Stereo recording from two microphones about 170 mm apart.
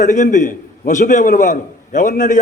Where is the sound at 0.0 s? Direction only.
50° left (ahead or behind).